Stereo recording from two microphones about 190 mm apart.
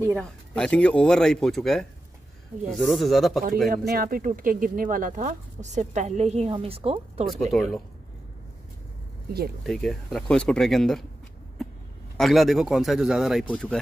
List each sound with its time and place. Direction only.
0.1 s speech: 5° left (ahead or behind)
3.7 s speech: 50° right (ahead or behind); by 7.2 s 30° right (ahead or behind)
7.5 s speech: centre (ahead or behind)
9.6 s speech: centre (ahead or behind)
12.2 s speech: centre (ahead or behind)